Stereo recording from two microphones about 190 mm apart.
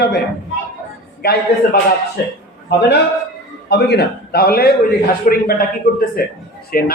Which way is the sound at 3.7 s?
60° left (ahead or behind).